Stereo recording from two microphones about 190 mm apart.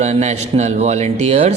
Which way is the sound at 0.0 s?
40° right (ahead or behind).